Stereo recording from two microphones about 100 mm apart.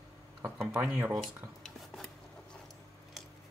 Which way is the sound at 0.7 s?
10° right (ahead or behind).